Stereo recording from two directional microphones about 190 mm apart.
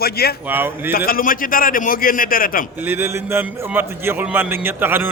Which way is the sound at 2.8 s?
10° right (ahead or behind).